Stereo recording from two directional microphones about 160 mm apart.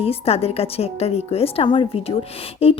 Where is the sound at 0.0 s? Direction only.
40° left (ahead or behind).